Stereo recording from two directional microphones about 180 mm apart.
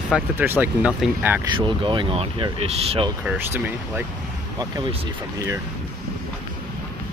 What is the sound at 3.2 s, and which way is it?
Speech, 10° right (ahead or behind).